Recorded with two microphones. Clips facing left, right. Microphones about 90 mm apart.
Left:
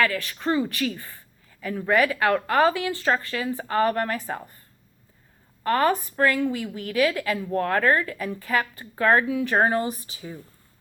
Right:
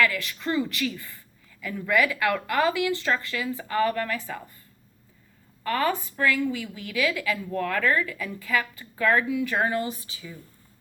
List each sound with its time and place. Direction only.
0.0 s speech: 35° left (ahead or behind)
5.6 s speech: 35° left (ahead or behind)